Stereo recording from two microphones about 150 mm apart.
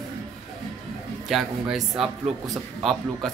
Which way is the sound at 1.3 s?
Centre (ahead or behind).